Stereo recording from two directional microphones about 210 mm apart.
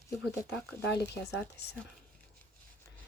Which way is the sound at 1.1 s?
50° left (ahead or behind).